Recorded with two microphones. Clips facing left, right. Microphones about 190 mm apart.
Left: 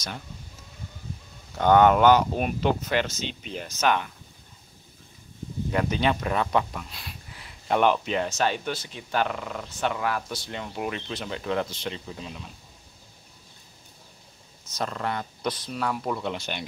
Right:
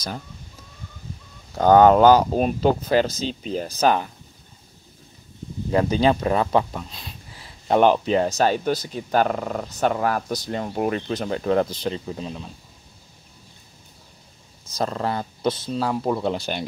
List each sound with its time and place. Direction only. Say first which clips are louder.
1.6 s speech: right 4 dB; 35° right (ahead or behind)
5.7 s speech: right 6 dB; 30° right (ahead or behind)
14.8 s speech: right 5 dB; 35° right (ahead or behind)